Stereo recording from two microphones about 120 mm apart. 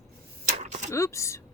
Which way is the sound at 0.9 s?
25° left (ahead or behind).